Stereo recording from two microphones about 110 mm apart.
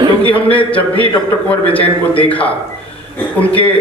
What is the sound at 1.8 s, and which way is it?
Speech, 55° left (ahead or behind).